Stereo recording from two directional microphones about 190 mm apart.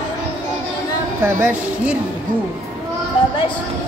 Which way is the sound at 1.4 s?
5° right (ahead or behind).